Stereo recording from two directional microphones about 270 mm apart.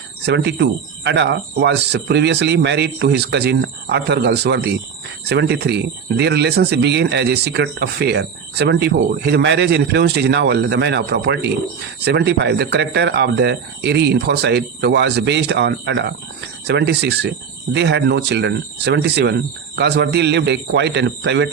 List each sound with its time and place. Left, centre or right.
0.3 s speech: right